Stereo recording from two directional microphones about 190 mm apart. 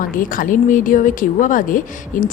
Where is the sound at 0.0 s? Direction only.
45° left (ahead or behind).